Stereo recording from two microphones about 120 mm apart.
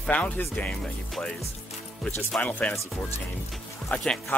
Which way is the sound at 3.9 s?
10° left (ahead or behind).